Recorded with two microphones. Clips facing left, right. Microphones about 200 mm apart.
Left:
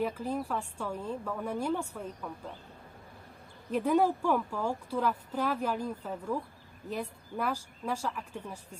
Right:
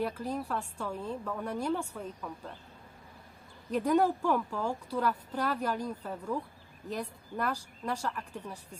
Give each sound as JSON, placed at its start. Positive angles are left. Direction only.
{"t": 0.0, "sound": "speech", "side_deg": 10}
{"t": 3.7, "sound": "speech", "side_deg": 10}